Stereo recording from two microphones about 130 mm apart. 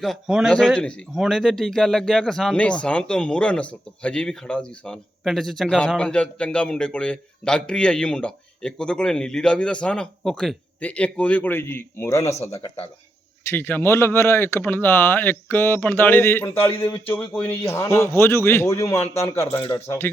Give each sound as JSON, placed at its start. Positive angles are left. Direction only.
{"t": 0.0, "sound": "a man's voice", "side_deg": 0}